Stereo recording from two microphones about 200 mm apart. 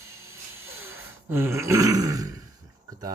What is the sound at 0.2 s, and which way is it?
Dog, 15° right (ahead or behind).